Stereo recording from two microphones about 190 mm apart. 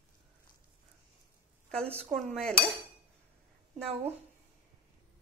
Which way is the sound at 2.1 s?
5° left (ahead or behind).